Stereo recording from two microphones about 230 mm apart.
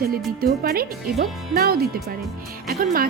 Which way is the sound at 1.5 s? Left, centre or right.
Right.